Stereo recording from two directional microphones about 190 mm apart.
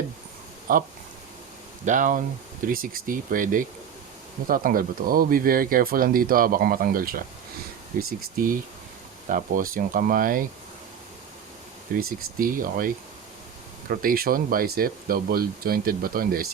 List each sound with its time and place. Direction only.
0.7 s speech: 50° right (ahead or behind)
11.9 s speech: 50° right (ahead or behind)